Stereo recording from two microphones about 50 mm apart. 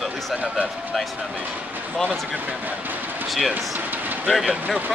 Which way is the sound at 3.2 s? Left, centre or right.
Centre.